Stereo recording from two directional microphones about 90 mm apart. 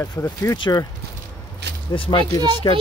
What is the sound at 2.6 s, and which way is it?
Speech, 55° left (ahead or behind).